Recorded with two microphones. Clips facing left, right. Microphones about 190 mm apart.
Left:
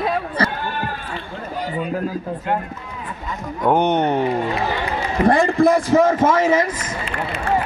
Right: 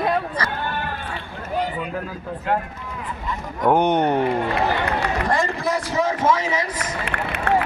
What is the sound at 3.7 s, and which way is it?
Speech, 10° right (ahead or behind).